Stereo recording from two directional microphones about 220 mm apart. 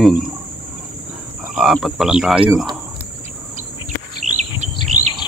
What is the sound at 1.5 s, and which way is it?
Speech, centre (ahead or behind).